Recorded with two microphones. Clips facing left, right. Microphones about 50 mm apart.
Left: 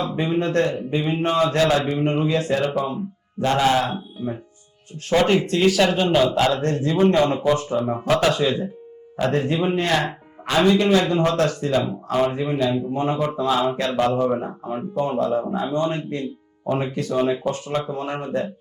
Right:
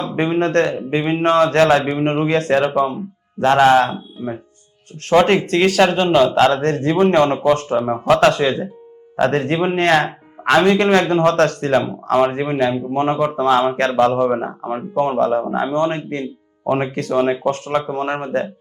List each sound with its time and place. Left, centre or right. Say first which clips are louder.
0.2 s a man's voice: right 5 dB; right
1.6 s a man's voice: right 5 dB; right
5.0 s a man's voice: right 5 dB; right